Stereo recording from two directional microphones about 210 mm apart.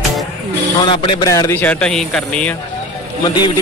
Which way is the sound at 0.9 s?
25° left (ahead or behind).